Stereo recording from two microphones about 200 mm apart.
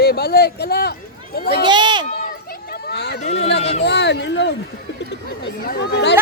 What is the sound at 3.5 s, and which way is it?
Speech, 30° left (ahead or behind).